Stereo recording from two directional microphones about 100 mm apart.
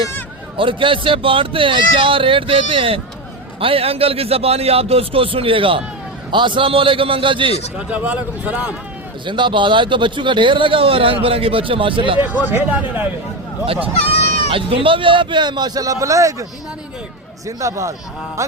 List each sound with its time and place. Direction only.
0.5 s a man's voice: 60° right (ahead or behind)
7.8 s a man's voice: 10° right (ahead or behind)
9.2 s speech: 50° right (ahead or behind)
12.2 s a man's voice: 20° right (ahead or behind)
14.5 s a man's voice: 60° right (ahead or behind); by 18.5 s 30° right (ahead or behind)